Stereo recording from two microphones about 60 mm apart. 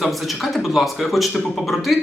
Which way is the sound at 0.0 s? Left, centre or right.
Centre.